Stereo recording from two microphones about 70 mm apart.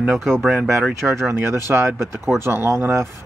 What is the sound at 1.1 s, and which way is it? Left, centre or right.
Speech, right.